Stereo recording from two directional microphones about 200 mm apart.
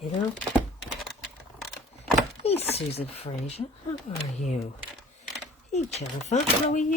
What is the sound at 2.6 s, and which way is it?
Speech, 30° left (ahead or behind).